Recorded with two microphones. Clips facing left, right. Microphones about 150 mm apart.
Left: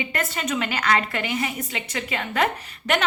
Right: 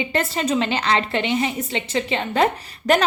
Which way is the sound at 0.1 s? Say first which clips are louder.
Right 5 dB; 30° right (ahead or behind).